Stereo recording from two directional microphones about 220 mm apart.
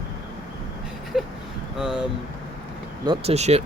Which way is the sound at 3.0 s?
25° right (ahead or behind).